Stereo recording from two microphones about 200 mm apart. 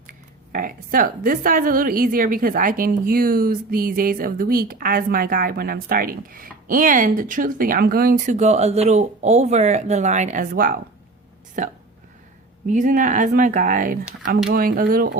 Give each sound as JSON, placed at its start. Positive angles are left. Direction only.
{"t": 0.1, "sound": "speech", "side_deg": -45}